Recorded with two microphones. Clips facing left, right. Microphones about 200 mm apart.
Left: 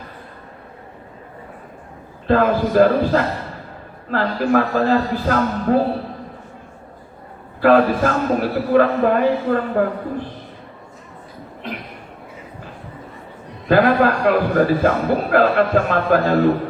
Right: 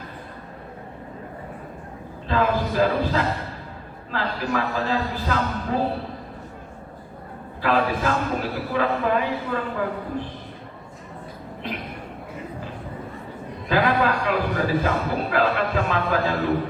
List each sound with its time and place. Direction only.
2.2 s a man's voice: 50° left (ahead or behind)
7.6 s a man's voice: 50° left (ahead or behind)
13.7 s a man's voice: 50° left (ahead or behind)